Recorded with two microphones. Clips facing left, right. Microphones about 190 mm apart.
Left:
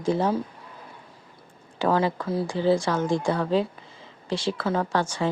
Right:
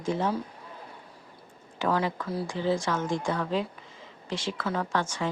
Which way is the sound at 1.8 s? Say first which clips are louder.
Left 4 dB; 30° left (ahead or behind).